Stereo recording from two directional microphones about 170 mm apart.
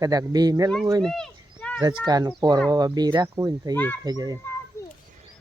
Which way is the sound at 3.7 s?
10° left (ahead or behind).